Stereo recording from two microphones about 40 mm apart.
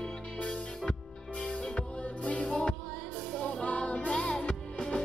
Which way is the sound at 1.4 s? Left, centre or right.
Left.